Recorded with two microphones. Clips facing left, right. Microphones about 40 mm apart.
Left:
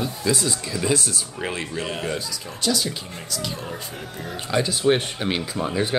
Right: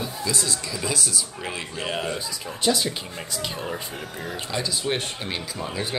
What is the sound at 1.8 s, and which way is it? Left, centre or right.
Speech, centre.